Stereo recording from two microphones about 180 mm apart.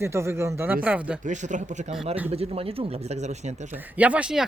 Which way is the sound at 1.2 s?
45° right (ahead or behind).